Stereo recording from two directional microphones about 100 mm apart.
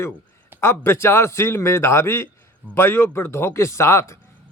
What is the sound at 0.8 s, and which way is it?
A man's voice, 25° left (ahead or behind).